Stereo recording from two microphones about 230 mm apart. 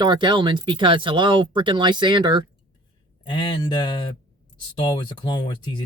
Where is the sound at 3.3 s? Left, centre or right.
Centre.